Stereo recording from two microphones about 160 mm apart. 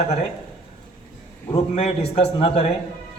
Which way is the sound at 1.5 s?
40° left (ahead or behind).